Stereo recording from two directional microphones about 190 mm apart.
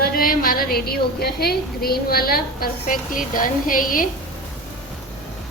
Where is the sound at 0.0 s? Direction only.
50° left (ahead or behind).